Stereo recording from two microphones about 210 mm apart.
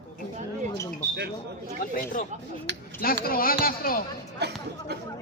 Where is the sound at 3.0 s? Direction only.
45° left (ahead or behind).